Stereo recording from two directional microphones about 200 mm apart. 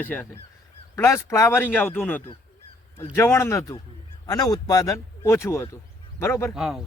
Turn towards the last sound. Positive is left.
turn(degrees=0)  # may be behind; listen again after turning